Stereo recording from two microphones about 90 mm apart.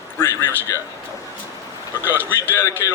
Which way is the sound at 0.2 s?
30° left (ahead or behind).